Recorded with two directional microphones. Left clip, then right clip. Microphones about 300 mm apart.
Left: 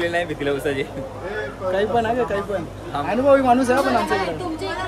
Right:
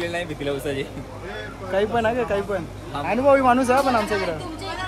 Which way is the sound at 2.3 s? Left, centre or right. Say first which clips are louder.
Even; centre.